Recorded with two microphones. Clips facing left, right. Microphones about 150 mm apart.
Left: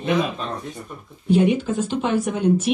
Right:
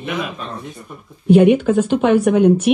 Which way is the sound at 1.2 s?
65° right (ahead or behind).